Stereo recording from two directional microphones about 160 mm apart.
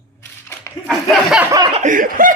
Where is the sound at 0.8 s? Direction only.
Centre (ahead or behind).